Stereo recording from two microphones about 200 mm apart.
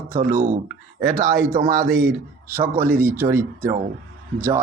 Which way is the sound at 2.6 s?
10° right (ahead or behind).